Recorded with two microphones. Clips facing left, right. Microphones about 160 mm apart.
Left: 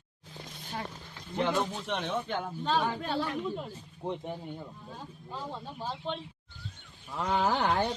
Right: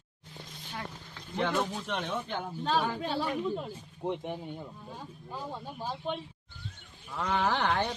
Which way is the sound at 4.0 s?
10° right (ahead or behind).